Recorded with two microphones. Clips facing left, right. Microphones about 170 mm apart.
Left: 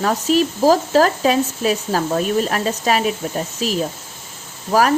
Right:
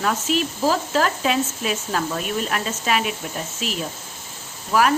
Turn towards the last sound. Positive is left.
turn(degrees=40)  # may be behind; listen again after turning